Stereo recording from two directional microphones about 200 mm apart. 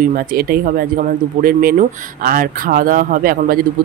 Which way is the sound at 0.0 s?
45° right (ahead or behind).